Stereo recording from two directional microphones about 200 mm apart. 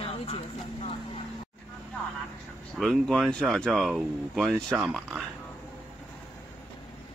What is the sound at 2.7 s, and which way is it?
Speech, centre (ahead or behind).